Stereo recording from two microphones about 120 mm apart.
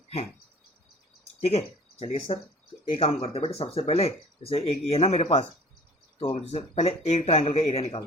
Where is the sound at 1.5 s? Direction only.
55° left (ahead or behind).